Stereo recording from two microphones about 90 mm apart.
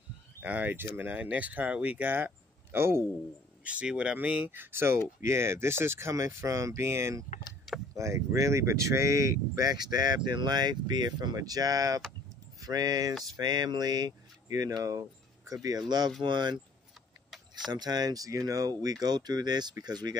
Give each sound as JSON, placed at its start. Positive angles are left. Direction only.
{"t": 0.4, "sound": "speech", "side_deg": -20}
{"t": 3.6, "sound": "speech", "side_deg": -10}
{"t": 4.5, "sound": "speech", "side_deg": -25}
{"t": 16.2, "sound": "speech", "side_deg": -60}
{"t": 17.6, "sound": "speech", "side_deg": -50}